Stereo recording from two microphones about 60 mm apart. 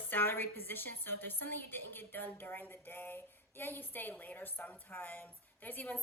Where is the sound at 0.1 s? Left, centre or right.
Left.